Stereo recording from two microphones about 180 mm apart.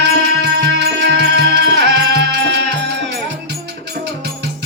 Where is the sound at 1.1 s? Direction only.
70° right (ahead or behind).